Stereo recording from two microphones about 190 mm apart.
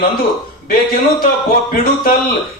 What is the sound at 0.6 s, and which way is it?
A man's voice, 50° left (ahead or behind).